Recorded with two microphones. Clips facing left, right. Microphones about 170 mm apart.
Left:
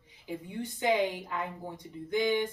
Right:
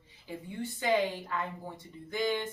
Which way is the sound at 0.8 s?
15° left (ahead or behind).